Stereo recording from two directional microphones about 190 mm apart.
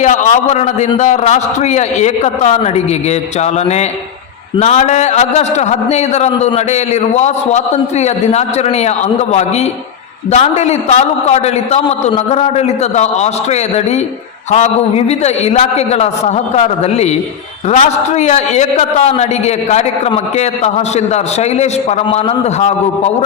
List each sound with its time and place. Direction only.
0.0 s a man's voice: 40° left (ahead or behind)
21.6 s a man's voice: 35° left (ahead or behind)